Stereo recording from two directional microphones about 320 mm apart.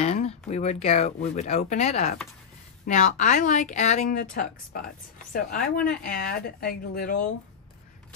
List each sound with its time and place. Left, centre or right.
0.0 s speech: left